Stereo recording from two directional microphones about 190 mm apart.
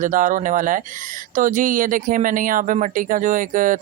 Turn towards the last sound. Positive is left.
turn(degrees=-45)  # may be behind; listen again after turning